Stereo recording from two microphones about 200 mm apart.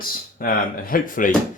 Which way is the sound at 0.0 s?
45° left (ahead or behind).